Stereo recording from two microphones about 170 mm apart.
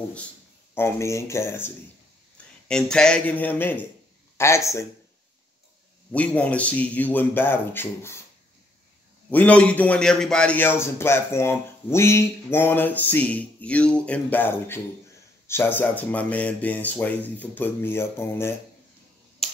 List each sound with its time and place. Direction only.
0.7 s a man's voice: 15° left (ahead or behind)
2.3 s a man's voice: 5° left (ahead or behind)
6.1 s a man's voice: 10° left (ahead or behind)
9.3 s a man's voice: 10° left (ahead or behind)
19.4 s finger snapping: centre (ahead or behind)